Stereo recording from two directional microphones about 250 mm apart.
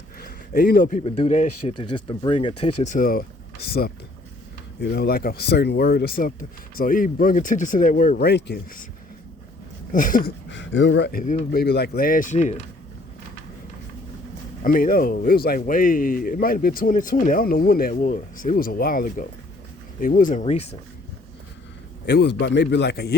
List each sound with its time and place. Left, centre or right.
0.2 s speech: left
2.8 s speech: left
9.9 s speech: left
14.6 s speech: left
22.0 s a man's voice: left